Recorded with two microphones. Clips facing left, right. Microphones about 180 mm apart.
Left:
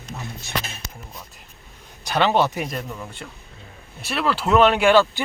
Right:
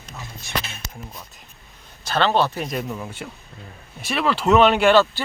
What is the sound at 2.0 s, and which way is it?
Speech, 15° left (ahead or behind).